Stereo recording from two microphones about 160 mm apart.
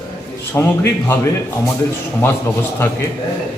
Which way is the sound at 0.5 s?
15° left (ahead or behind).